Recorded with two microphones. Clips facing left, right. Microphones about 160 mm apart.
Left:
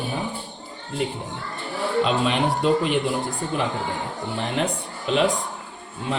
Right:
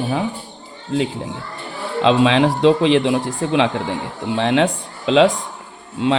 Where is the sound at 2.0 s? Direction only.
90° right.